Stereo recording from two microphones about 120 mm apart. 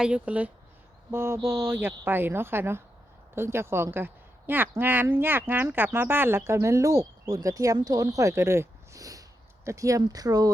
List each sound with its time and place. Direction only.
0.0 s a woman's voice: 10° right (ahead or behind); by 10.5 s 30° right (ahead or behind)